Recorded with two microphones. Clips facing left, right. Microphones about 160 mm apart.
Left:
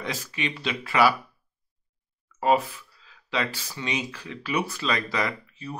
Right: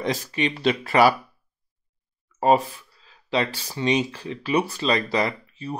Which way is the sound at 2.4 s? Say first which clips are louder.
Right 3 dB; 35° right (ahead or behind).